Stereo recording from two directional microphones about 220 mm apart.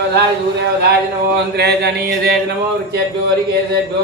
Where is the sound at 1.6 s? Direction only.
45° right (ahead or behind).